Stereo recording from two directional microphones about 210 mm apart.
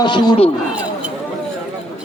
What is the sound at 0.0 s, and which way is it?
Speech, 20° left (ahead or behind).